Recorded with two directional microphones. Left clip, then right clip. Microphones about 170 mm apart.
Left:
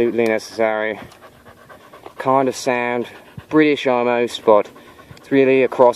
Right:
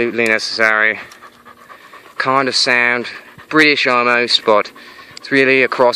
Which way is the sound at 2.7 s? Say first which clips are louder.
Right 6 dB; 15° left (ahead or behind).